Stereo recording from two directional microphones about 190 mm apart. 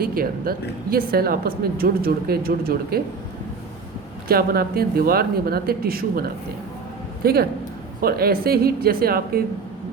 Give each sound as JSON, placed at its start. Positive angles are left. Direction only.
{"t": 0.0, "sound": "a woman's voice", "side_deg": -50}
{"t": 4.3, "sound": "a woman's voice", "side_deg": -55}